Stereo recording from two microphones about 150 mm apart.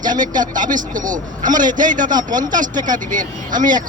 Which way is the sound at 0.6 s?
60° right (ahead or behind).